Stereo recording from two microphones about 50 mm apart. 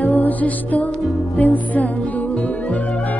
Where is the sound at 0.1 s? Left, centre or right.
Left.